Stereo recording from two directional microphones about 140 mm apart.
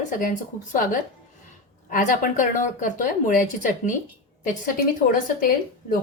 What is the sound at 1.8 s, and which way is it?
Speech, 80° left.